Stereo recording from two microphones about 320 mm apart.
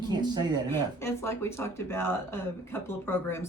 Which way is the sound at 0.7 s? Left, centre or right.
Centre.